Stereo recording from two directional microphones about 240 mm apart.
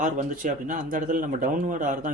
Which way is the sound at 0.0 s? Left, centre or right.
Right.